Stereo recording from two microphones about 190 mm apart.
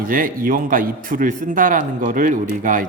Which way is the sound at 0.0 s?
45° right (ahead or behind).